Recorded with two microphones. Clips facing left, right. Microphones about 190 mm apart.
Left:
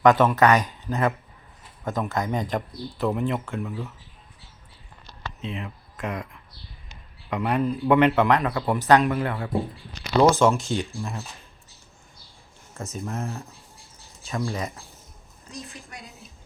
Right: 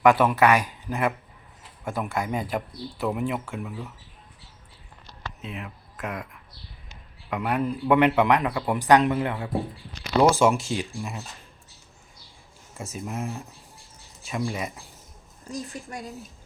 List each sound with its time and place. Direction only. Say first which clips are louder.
0.0 s speech: left 1 dB; 10° right (ahead or behind)
5.4 s speech: left 5 dB; 5° right (ahead or behind)
12.7 s speech: left 1 dB; 10° right (ahead or behind)
15.7 s a woman's voice: right 6 dB; 45° right (ahead or behind)